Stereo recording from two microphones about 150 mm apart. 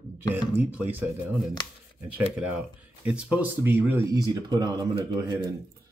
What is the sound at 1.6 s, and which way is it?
Speech, 30° left (ahead or behind).